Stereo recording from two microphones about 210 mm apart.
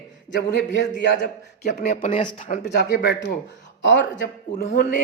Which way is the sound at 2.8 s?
50° left (ahead or behind).